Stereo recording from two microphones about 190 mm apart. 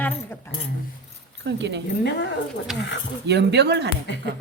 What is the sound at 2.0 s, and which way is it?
Speech, 65° left (ahead or behind).